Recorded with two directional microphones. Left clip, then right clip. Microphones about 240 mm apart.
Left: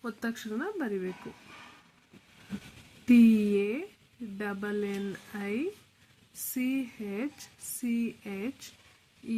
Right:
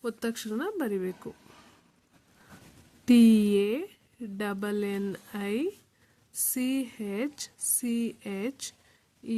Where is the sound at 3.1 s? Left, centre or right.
Right.